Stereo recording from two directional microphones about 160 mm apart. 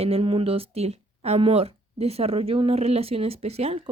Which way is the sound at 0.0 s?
35° right (ahead or behind).